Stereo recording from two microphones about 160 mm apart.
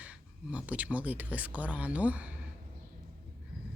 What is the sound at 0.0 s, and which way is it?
Speech, 10° right (ahead or behind).